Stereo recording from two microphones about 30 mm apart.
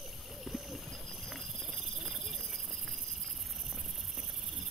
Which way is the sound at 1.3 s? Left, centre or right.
Centre.